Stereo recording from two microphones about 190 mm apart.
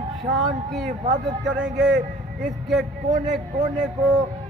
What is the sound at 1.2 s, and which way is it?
Speech, centre (ahead or behind).